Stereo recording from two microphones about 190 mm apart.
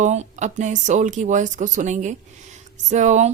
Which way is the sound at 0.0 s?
40° right (ahead or behind).